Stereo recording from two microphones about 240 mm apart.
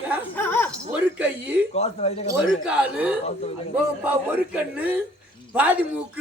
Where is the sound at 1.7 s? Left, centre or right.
Left.